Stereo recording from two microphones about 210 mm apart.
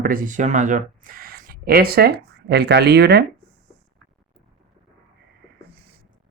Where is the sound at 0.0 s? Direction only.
40° right (ahead or behind).